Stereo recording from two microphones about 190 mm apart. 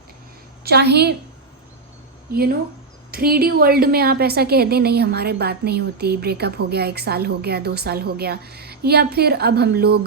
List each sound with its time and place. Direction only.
0.6 s a woman's voice: 60° right (ahead or behind)
3.1 s a woman's voice: 55° right (ahead or behind)